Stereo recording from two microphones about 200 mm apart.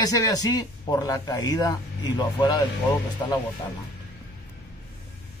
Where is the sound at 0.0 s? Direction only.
20° left (ahead or behind).